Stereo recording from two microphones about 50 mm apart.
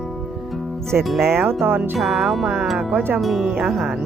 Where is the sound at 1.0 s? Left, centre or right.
Centre.